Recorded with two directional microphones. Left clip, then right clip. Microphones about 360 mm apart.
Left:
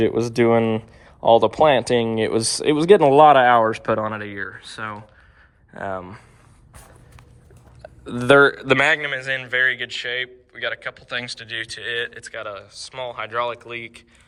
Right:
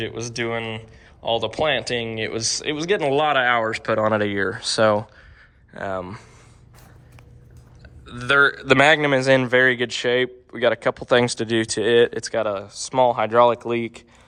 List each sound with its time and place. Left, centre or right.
0.0 s speech: centre
7.8 s speech: centre